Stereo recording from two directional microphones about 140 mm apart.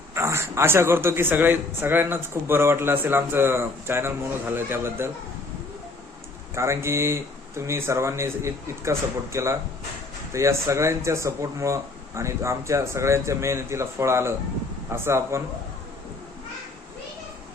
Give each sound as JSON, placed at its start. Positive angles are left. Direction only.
{"t": 0.1, "sound": "a man's voice", "side_deg": -20}
{"t": 6.5, "sound": "speech", "side_deg": -20}